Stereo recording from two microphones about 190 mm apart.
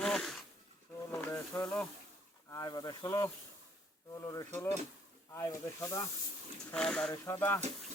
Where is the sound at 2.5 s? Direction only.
20° left (ahead or behind).